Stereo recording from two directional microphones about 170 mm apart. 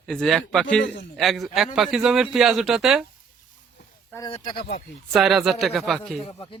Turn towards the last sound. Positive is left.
turn(degrees=30)  # may be behind; listen again after turning